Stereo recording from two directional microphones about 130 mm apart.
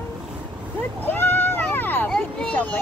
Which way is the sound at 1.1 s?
15° left (ahead or behind).